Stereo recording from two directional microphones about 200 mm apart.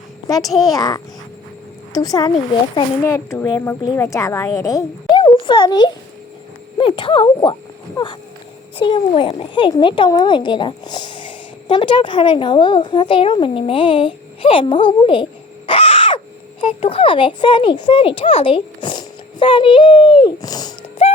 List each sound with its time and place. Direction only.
0.3 s a woman's voice: 20° left (ahead or behind)
21.0 s music: 30° left (ahead or behind)